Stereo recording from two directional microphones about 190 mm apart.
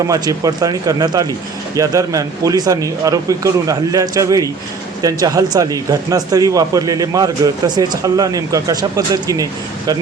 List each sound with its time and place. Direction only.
0.1 s speech: 20° right (ahead or behind)